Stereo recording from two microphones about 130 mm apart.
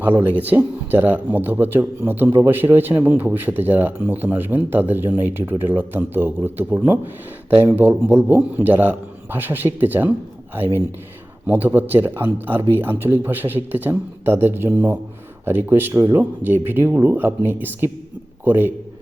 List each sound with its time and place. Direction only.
0.0 s speech: 15° right (ahead or behind)
11.4 s speech: 15° right (ahead or behind)